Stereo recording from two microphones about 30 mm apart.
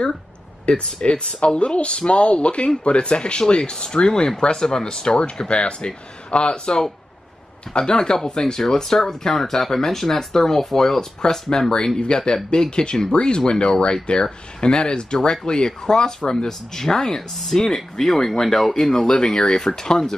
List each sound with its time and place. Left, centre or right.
0.7 s speech: left
6.5 s speech: left
12.1 s speech: left; by 19.0 s centre
19.0 s speech: left